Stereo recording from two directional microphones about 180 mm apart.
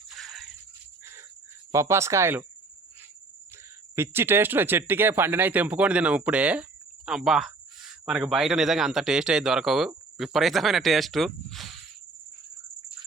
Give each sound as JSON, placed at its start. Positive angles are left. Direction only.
{"t": 0.2, "sound": "a sound", "side_deg": 0}
{"t": 1.7, "sound": "speech", "side_deg": -15}
{"t": 3.9, "sound": "speech", "side_deg": -15}